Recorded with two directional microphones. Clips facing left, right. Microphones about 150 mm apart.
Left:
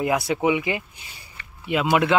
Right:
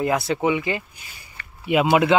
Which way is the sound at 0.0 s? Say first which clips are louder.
Even; 15° left (ahead or behind).